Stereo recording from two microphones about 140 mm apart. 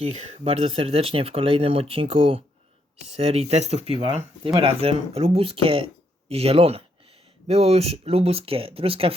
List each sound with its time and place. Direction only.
0.0 s speech: 55° right (ahead or behind)